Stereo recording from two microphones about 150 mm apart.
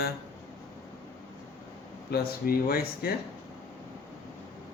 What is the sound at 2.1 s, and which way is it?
Speech, 90° left.